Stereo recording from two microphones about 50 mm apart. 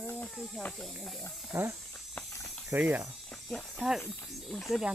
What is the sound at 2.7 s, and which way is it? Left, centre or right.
Speech, right.